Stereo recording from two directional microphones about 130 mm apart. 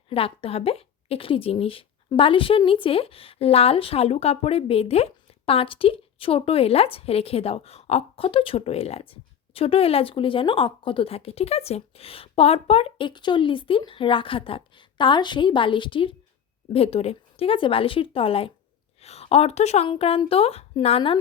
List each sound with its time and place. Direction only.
0.1 s a woman's voice: 45° left (ahead or behind)
19.9 s a woman's voice: 45° left (ahead or behind)